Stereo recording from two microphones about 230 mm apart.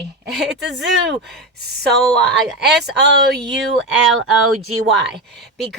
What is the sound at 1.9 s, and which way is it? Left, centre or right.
Speech, centre.